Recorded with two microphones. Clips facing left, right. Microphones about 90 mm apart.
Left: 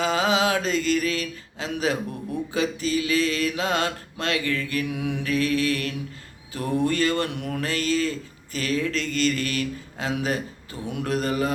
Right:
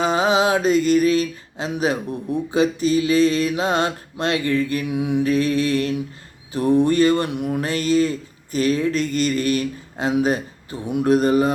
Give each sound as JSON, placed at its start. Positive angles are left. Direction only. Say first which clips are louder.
{"t": 0.0, "sound": "mantra", "louder": "right 4 dB", "side_deg": -20}